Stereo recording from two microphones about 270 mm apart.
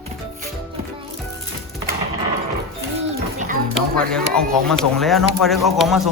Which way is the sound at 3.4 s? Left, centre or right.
Right.